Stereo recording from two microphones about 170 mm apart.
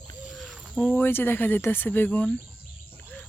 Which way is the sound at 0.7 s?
10° left (ahead or behind).